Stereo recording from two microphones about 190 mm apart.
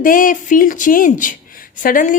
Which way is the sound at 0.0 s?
45° left (ahead or behind).